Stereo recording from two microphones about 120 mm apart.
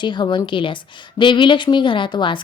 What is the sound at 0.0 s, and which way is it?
A woman's voice, 40° left (ahead or behind).